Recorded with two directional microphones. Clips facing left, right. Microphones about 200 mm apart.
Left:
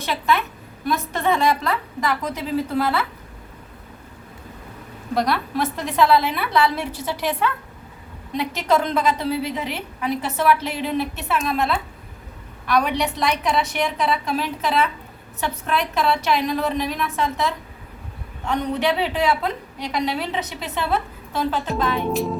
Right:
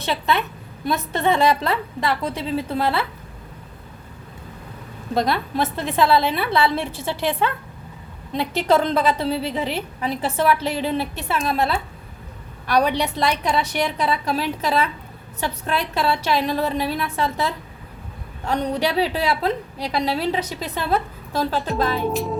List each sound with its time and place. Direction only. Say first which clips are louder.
0.0 s a woman's voice: even; 30° right (ahead or behind)
5.1 s a woman's voice: right 1 dB; 25° right (ahead or behind)